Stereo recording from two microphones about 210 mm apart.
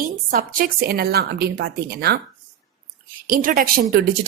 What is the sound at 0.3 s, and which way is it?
Speech, 45° right (ahead or behind).